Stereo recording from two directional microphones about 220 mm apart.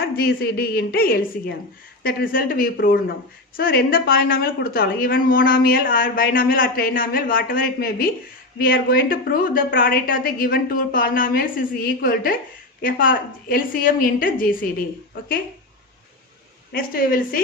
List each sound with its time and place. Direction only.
0.0 s a woman's voice: 45° left (ahead or behind)
16.7 s a woman's voice: 40° left (ahead or behind)